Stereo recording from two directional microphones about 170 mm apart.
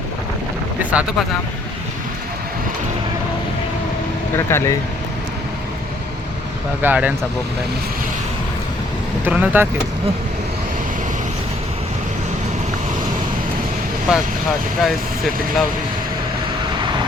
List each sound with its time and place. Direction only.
0.8 s speech: 10° right (ahead or behind)
4.4 s speech: 15° left (ahead or behind)
6.8 s speech: 10° right (ahead or behind)
9.2 s speech: 10° right (ahead or behind)
14.8 s speech: centre (ahead or behind)